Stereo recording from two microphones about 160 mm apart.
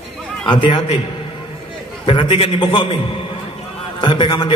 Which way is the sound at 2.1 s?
35° left (ahead or behind).